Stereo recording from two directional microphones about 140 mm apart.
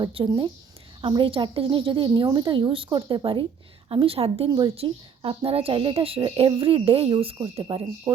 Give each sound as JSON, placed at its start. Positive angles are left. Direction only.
{"t": 0.0, "sound": "a woman's voice", "side_deg": -40}